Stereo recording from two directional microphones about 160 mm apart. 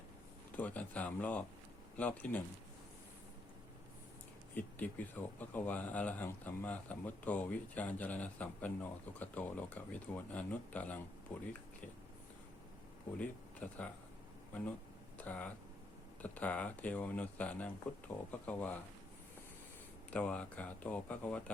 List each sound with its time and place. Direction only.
0.5 s speech: 10° left (ahead or behind)
4.5 s speech: 10° left (ahead or behind)
13.1 s speech: 10° left (ahead or behind)
15.2 s speech: 10° left (ahead or behind)
20.1 s speech: 10° left (ahead or behind)